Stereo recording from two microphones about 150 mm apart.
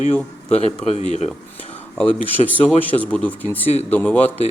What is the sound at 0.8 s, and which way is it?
Speech, 45° left (ahead or behind).